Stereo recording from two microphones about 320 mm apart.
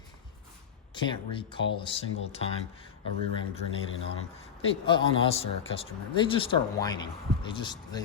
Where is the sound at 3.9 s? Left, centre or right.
Left.